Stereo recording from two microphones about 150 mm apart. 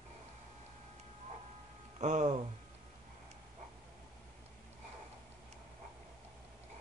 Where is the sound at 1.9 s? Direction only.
50° right (ahead or behind).